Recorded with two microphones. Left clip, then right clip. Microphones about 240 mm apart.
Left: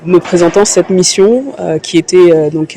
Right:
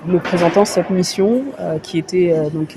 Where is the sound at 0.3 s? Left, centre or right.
Left.